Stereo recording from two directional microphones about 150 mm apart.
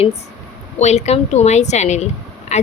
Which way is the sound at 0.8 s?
45° left (ahead or behind).